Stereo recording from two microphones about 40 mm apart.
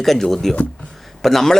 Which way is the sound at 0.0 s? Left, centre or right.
Centre.